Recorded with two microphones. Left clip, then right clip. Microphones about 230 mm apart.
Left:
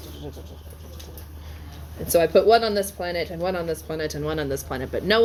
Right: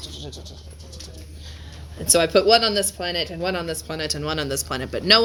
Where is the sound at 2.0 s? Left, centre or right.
Right.